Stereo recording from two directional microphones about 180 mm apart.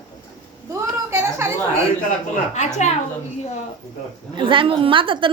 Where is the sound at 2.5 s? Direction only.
40° left (ahead or behind).